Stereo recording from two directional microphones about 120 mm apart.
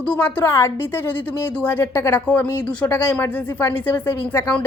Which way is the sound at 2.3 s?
10° left (ahead or behind).